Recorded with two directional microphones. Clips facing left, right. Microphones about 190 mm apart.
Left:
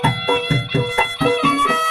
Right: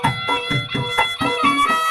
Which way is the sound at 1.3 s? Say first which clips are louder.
Left 3 dB; 30° left (ahead or behind).